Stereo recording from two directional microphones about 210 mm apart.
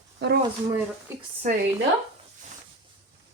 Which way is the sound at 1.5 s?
35° right (ahead or behind).